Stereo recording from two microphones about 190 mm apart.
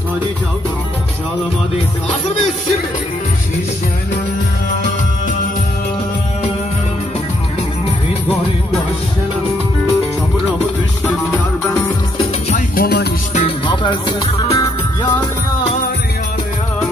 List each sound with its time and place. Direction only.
2.0 s music: centre (ahead or behind)
12.2 s music: 40° left (ahead or behind); by 13.1 s 55° left (ahead or behind)
13.7 s music: 25° left (ahead or behind)